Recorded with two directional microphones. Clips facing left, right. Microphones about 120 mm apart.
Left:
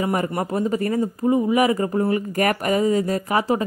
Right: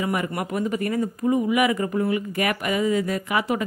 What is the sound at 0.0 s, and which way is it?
Speech, 35° left (ahead or behind).